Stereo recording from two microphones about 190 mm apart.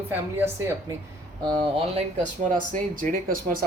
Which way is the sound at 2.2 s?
45° right (ahead or behind).